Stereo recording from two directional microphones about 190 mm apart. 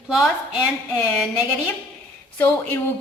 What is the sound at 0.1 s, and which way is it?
Speech, centre (ahead or behind).